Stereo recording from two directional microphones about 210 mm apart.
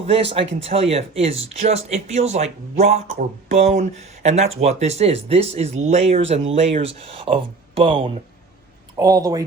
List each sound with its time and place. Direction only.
0.0 s speech: 30° right (ahead or behind)